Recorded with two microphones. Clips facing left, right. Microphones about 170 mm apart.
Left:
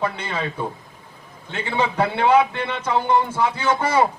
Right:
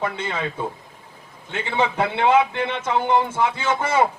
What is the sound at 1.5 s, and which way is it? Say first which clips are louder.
A man's voice: even; 20° right (ahead or behind).